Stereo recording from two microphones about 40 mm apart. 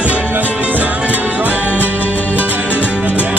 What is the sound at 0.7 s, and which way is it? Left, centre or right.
Music, right.